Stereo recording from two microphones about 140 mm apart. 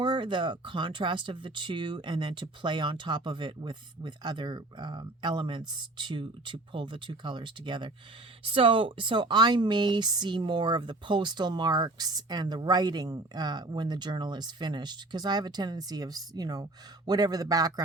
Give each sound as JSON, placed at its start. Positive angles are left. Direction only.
{"t": 0.0, "sound": "speech", "side_deg": -35}